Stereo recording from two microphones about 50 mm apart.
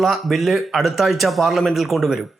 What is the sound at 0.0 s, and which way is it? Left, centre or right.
Speech, centre.